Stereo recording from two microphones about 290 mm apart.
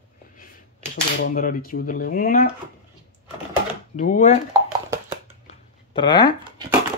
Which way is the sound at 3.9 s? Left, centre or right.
Left.